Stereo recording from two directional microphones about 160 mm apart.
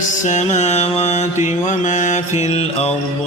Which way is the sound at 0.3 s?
45° left (ahead or behind).